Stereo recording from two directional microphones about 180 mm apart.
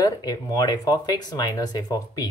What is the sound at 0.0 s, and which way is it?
Speech, 20° left (ahead or behind).